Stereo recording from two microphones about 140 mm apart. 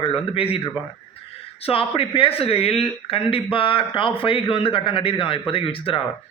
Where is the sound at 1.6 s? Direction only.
40° left (ahead or behind).